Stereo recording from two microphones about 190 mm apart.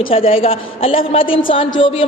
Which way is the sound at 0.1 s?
30° left (ahead or behind).